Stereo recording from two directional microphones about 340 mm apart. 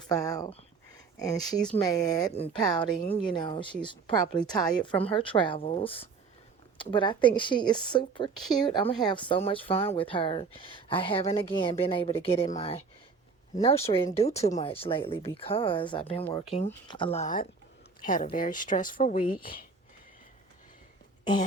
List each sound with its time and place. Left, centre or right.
0.1 s speech: centre